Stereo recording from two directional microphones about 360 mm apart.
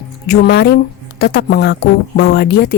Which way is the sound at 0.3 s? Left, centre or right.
Left.